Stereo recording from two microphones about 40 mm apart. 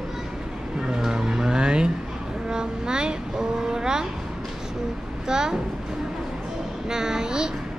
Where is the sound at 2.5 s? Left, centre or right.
Right.